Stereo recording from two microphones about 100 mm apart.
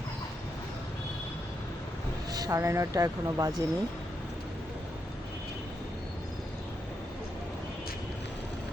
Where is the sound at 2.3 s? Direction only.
40° right (ahead or behind).